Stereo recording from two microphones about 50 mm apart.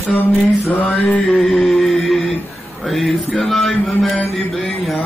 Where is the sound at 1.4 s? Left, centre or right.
Centre.